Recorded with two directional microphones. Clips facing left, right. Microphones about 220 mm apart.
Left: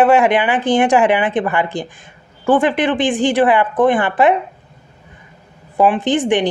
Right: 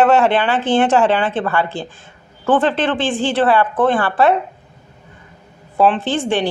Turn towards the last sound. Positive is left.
turn(degrees=15)  # may be behind; listen again after turning